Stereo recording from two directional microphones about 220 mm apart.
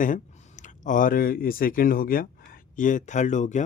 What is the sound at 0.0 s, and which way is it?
Speech, 35° left (ahead or behind).